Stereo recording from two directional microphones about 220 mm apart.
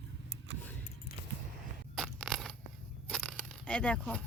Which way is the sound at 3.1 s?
5° left (ahead or behind).